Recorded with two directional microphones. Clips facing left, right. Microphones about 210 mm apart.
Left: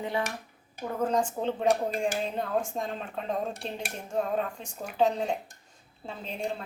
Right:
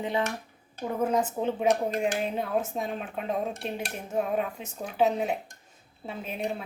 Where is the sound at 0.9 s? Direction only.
10° right (ahead or behind).